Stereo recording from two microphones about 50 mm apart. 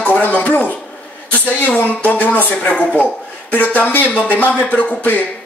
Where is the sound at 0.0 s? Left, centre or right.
Left.